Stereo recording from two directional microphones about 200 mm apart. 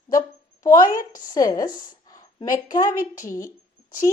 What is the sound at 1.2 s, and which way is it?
A woman's voice, 20° left (ahead or behind).